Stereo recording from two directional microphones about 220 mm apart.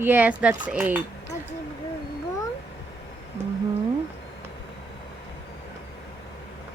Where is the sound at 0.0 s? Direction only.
10° right (ahead or behind).